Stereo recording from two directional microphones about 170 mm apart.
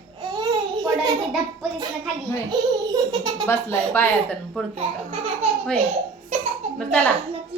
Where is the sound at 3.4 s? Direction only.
15° left (ahead or behind).